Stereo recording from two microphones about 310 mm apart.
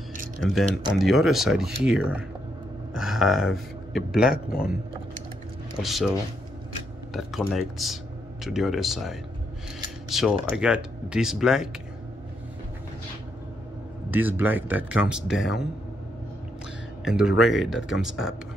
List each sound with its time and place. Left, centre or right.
0.4 s speech: centre
4.3 s speech: left
5.8 s speech: centre
7.2 s speech: centre
14.1 s speech: centre
17.0 s speech: centre